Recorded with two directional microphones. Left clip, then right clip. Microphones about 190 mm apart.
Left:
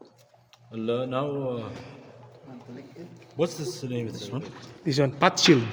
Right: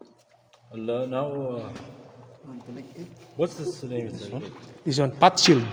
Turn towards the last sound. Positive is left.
turn(degrees=0)  # may be behind; listen again after turning